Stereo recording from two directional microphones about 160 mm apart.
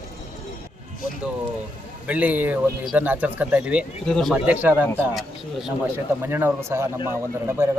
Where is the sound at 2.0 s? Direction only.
10° right (ahead or behind).